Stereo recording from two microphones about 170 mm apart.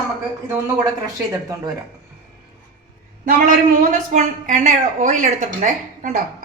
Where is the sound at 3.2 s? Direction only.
50° right (ahead or behind).